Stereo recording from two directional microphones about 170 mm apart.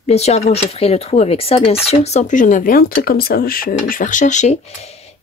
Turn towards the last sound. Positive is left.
turn(degrees=40)  # may be behind; listen again after turning